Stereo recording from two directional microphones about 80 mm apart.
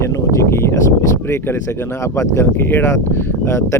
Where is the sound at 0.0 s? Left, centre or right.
Left.